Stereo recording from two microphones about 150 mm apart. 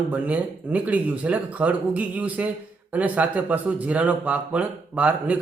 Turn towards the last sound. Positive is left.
turn(degrees=-10)  # may be behind; listen again after turning